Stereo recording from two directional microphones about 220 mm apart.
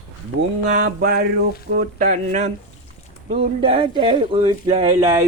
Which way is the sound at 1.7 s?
40° right (ahead or behind).